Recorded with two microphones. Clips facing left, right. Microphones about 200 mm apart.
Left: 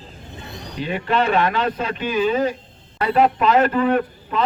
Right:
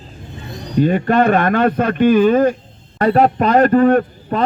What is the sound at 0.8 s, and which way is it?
A man's voice, 50° right (ahead or behind).